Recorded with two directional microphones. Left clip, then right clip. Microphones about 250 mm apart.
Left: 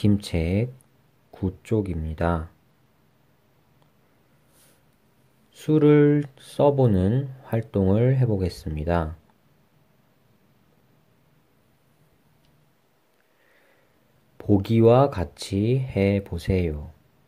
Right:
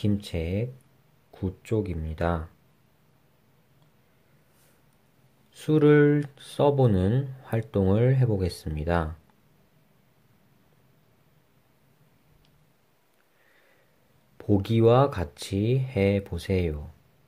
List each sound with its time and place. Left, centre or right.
0.0 s speech: centre
5.5 s speech: centre
14.4 s speech: centre